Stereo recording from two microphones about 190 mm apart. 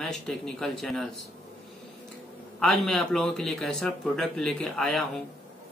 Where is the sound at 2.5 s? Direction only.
Centre (ahead or behind).